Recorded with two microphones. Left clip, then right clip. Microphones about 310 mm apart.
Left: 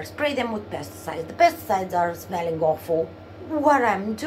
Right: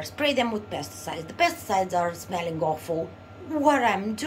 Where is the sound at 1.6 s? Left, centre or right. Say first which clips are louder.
Left 2 dB; centre.